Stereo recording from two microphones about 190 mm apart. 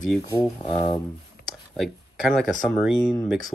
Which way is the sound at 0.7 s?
30° left (ahead or behind).